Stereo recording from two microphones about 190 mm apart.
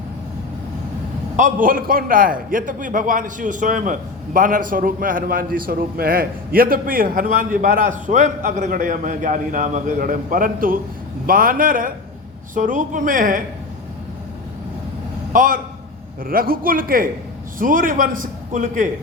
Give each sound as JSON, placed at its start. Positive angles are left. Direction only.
{"t": 1.4, "sound": "a man's voice", "side_deg": -45}
{"t": 15.3, "sound": "a man's voice", "side_deg": -45}